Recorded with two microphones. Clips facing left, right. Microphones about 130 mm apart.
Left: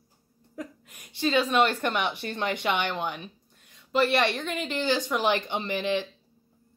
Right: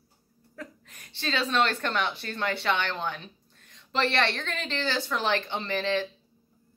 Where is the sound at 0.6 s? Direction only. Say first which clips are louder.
Left 4 dB; 10° left (ahead or behind).